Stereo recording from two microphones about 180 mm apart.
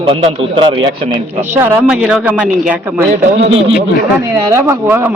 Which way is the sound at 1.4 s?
10° right (ahead or behind).